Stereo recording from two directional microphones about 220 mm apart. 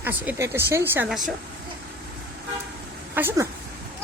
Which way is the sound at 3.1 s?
10° right (ahead or behind).